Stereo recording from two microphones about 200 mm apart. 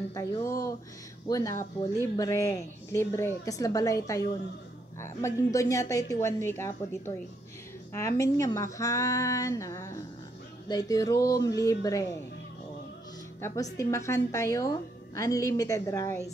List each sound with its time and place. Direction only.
0.1 s a woman's voice: 15° left (ahead or behind)
13.4 s a woman's voice: 15° left (ahead or behind)